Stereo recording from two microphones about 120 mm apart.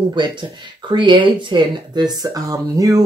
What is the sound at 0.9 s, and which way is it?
Speech, 40° right (ahead or behind).